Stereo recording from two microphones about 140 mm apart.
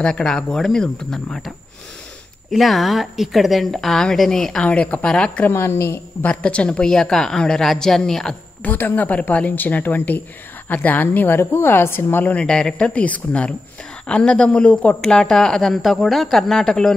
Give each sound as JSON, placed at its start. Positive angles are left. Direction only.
{"t": 0.0, "sound": "a woman's voice", "side_deg": 5}
{"t": 2.5, "sound": "a woman's voice", "side_deg": 0}
{"t": 5.5, "sound": "speech", "side_deg": 20}
{"t": 6.4, "sound": "a woman's voice", "side_deg": 10}